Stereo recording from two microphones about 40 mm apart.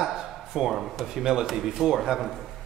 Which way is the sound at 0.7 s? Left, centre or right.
Centre.